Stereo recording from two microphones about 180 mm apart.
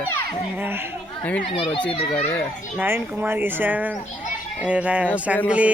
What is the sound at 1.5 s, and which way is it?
Speech, 30° left (ahead or behind).